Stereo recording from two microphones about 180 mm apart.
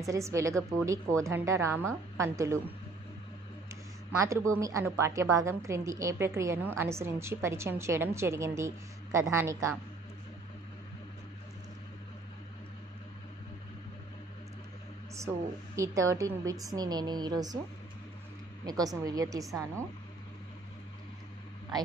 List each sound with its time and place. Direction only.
0.0 s a woman's voice: 15° right (ahead or behind)
4.1 s a woman's voice: 15° right (ahead or behind)
15.1 s a woman's voice: 15° right (ahead or behind)
18.7 s a woman's voice: 20° right (ahead or behind)